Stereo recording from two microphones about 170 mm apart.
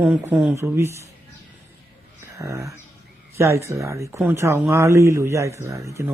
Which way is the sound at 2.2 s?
15° right (ahead or behind).